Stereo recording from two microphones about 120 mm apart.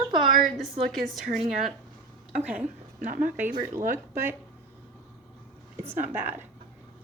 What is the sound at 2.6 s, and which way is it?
Speech, 90° right.